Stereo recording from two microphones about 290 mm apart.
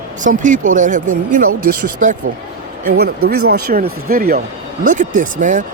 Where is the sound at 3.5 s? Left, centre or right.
Right.